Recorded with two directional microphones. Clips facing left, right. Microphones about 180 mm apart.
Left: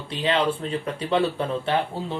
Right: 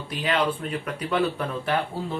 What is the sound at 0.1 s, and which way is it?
Speech, 30° left (ahead or behind).